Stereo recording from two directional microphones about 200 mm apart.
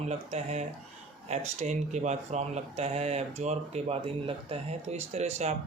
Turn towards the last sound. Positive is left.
turn(degrees=-30)  # may be behind; listen again after turning